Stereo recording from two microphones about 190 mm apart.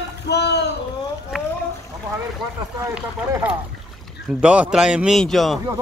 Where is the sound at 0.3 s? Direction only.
60° left (ahead or behind).